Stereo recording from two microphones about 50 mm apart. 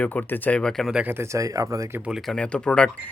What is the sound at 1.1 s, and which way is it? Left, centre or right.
Speech, right.